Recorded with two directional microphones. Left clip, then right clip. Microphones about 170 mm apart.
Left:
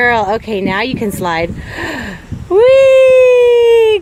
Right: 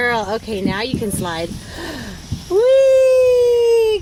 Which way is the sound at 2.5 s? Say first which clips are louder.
Left 5 dB; 20° left (ahead or behind).